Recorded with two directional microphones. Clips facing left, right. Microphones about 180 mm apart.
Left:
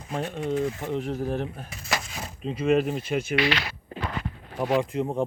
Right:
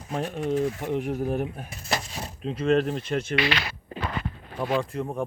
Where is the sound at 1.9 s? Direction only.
35° right (ahead or behind).